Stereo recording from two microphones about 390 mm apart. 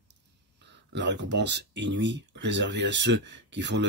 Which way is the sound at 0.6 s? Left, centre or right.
Right.